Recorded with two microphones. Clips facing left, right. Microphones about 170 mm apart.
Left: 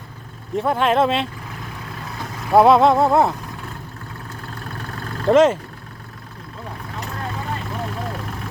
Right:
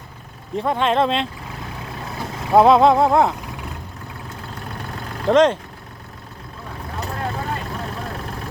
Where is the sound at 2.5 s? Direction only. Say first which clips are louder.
Even; centre (ahead or behind).